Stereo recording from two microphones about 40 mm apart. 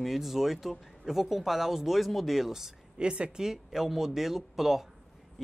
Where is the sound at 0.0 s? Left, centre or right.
Centre.